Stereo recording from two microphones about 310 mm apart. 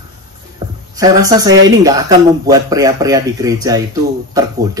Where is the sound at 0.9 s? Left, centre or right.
Centre.